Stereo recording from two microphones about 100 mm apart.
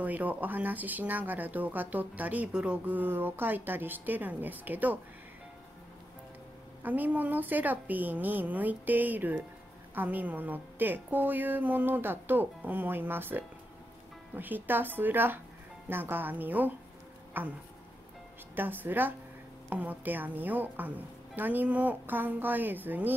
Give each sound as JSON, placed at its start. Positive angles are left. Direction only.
{"t": 0.0, "sound": "speech", "side_deg": -15}
{"t": 6.8, "sound": "a woman's voice", "side_deg": -15}
{"t": 18.6, "sound": "a woman's voice", "side_deg": -20}